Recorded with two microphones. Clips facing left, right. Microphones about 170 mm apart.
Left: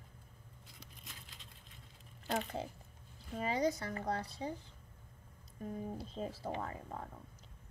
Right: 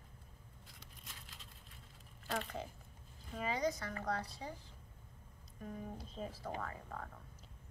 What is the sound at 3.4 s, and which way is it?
A woman's voice, 30° left (ahead or behind).